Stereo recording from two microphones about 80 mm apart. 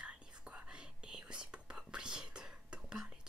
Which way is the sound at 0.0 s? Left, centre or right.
Centre.